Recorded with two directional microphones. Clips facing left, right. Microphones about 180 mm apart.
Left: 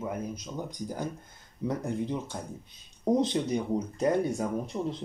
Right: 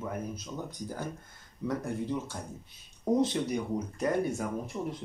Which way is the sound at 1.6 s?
20° left (ahead or behind).